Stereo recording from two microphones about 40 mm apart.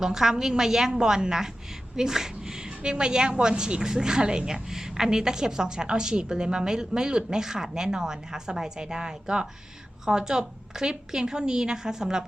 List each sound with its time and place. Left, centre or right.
0.0 s a woman's voice: centre